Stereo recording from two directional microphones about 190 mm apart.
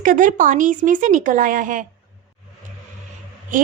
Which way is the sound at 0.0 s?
45° right (ahead or behind).